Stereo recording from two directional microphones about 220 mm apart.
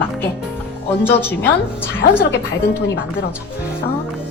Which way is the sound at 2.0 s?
45° left (ahead or behind).